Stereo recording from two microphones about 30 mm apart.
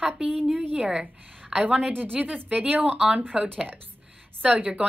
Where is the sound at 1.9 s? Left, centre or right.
Right.